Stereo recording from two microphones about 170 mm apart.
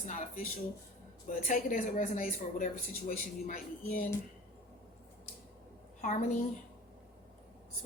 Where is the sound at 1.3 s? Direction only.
50° left (ahead or behind).